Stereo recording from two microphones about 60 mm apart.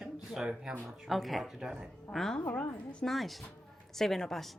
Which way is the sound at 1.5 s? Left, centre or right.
Centre.